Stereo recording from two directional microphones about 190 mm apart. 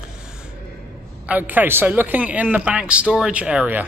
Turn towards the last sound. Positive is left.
turn(degrees=-5)  # may be behind; listen again after turning